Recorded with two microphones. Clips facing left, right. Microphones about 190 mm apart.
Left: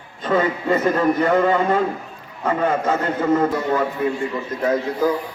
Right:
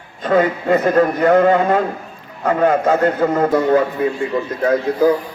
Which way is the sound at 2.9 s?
35° right (ahead or behind).